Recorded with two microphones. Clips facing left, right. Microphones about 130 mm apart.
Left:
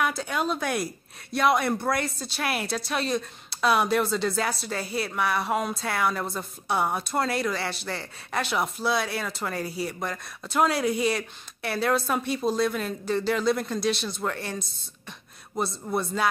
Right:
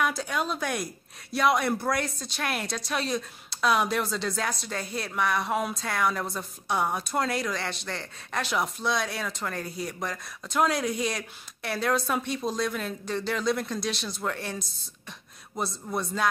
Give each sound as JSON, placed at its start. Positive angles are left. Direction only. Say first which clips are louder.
{"t": 0.0, "sound": "a woman's voice", "louder": "left 1 dB", "side_deg": 0}